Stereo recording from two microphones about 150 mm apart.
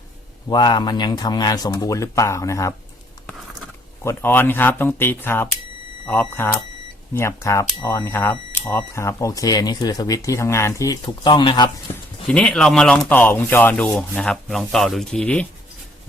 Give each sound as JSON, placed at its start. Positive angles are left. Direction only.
{"t": 0.4, "sound": "speech", "side_deg": 30}
{"t": 4.0, "sound": "speech", "side_deg": 15}
{"t": 11.9, "sound": "speech", "side_deg": 10}